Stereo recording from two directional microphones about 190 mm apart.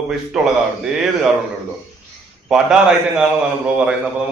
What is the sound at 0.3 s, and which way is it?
Speech, 5° right (ahead or behind).